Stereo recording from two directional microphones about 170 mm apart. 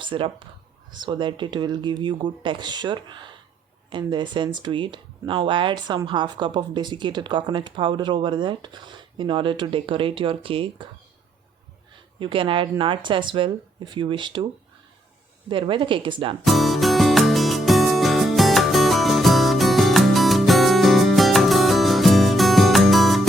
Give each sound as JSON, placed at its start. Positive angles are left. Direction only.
{"t": 0.0, "sound": "speech", "side_deg": -30}
{"t": 12.2, "sound": "speech", "side_deg": -30}
{"t": 15.4, "sound": "speech", "side_deg": -30}
{"t": 16.4, "sound": "music", "side_deg": 0}